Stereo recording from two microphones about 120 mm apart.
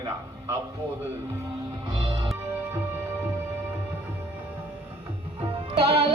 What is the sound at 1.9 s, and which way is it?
Music, 40° right (ahead or behind).